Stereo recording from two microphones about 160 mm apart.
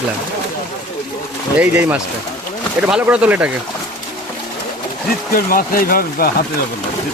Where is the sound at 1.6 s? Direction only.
10° right (ahead or behind).